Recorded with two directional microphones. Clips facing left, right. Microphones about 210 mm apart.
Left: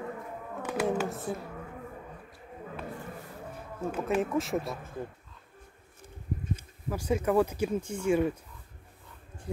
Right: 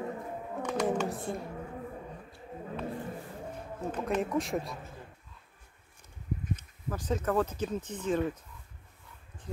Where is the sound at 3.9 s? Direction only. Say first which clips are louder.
Left 2 dB; 5° left (ahead or behind).